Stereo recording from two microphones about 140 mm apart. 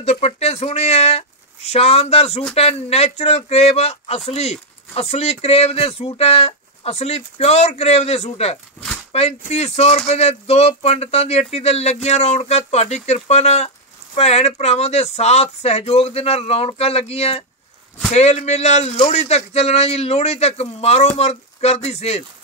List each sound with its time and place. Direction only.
0.0 s speech: 50° left (ahead or behind)